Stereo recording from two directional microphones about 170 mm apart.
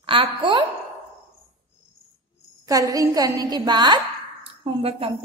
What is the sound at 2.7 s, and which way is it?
A woman's voice, 20° right (ahead or behind).